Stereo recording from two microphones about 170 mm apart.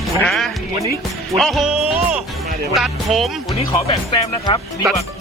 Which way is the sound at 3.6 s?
35° left (ahead or behind).